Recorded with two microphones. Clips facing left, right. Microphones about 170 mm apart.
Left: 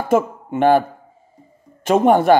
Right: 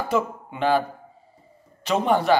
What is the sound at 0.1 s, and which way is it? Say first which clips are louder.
A man's voice: left 10 dB; 50° left (ahead or behind).